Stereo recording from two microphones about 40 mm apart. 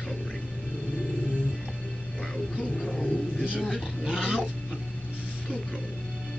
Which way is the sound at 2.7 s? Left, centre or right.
Left.